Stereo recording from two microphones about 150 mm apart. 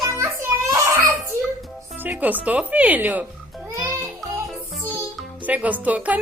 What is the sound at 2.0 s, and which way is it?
Speech, 10° right (ahead or behind).